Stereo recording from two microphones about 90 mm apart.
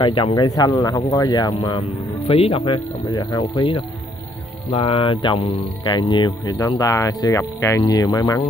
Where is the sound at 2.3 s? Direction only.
80° left.